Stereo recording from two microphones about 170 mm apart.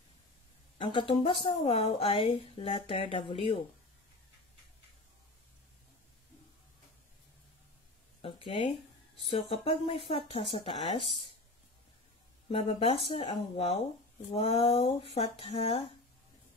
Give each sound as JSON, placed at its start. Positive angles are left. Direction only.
{"t": 0.7, "sound": "speech", "side_deg": 30}
{"t": 8.2, "sound": "a sound", "side_deg": 30}
{"t": 9.2, "sound": "speech", "side_deg": 35}
{"t": 12.4, "sound": "speech", "side_deg": 35}